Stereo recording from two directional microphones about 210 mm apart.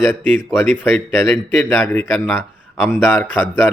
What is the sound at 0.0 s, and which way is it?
A man's voice, 10° left (ahead or behind).